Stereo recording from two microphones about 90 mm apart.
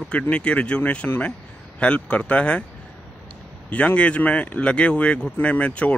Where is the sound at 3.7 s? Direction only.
15° left (ahead or behind).